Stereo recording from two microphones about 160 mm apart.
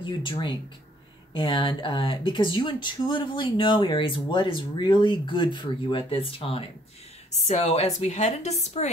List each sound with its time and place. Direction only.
0.0 s speech: 30° left (ahead or behind)